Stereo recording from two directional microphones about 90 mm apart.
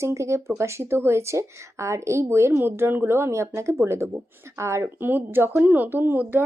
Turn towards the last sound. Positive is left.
turn(degrees=-25)  # may be behind; listen again after turning